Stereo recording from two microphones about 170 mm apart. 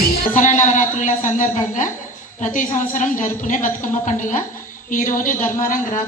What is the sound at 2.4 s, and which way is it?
A woman's voice, 50° left (ahead or behind).